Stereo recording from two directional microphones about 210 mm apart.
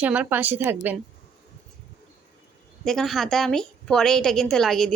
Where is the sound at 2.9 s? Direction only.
Centre (ahead or behind).